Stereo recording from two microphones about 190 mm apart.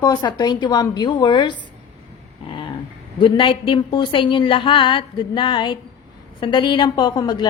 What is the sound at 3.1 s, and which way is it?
A woman's voice, 25° left (ahead or behind).